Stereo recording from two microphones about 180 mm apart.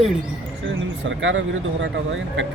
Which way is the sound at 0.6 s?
90° right.